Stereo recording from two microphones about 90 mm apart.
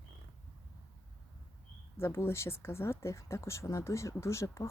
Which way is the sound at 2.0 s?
30° left (ahead or behind).